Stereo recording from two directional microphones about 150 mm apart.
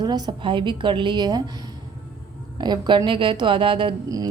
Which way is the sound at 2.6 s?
30° right (ahead or behind).